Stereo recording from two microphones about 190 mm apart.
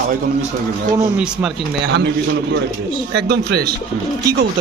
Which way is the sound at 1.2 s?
5° right (ahead or behind).